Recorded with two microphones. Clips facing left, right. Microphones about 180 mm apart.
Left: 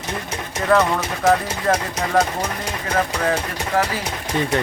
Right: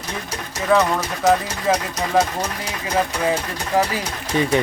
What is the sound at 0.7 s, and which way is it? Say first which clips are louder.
Speech: even; centre (ahead or behind).